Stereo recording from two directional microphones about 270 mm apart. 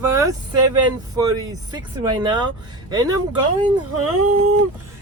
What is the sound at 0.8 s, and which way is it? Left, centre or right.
Speech, centre.